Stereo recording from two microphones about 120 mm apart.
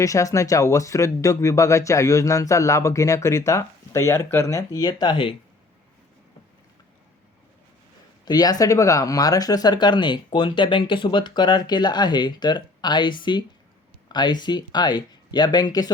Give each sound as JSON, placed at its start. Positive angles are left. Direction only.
{"t": 0.0, "sound": "speech", "side_deg": 25}
{"t": 8.2, "sound": "speech", "side_deg": 35}